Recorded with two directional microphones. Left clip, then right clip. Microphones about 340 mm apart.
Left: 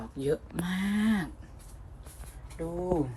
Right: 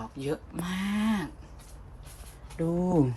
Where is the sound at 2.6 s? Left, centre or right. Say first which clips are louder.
Right 6 dB; right.